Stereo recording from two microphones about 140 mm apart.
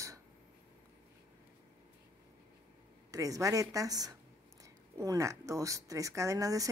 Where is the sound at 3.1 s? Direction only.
25° right (ahead or behind).